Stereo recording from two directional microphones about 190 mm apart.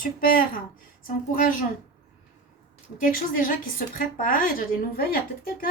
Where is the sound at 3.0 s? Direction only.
45° left (ahead or behind).